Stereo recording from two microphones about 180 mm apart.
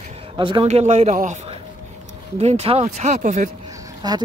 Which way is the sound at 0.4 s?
25° right (ahead or behind).